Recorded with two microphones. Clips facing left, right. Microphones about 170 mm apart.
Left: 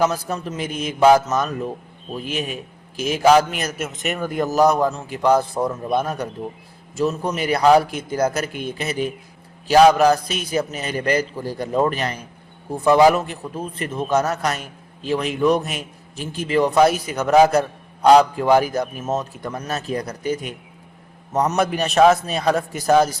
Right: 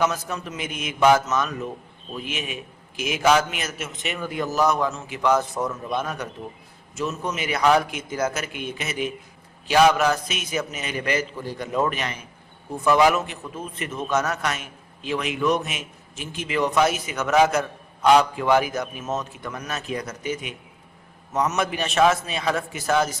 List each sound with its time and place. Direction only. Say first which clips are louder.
0.0 s a man's voice: left 4 dB; 35° left (ahead or behind)